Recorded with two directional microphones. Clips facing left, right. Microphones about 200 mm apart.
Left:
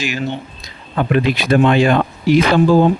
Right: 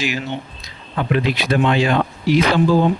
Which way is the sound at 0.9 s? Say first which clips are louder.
Left 3 dB; 50° left (ahead or behind).